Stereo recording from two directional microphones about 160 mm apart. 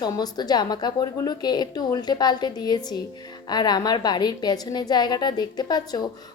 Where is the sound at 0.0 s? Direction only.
25° left (ahead or behind).